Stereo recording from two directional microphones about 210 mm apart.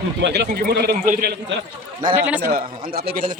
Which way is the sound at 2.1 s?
10° right (ahead or behind).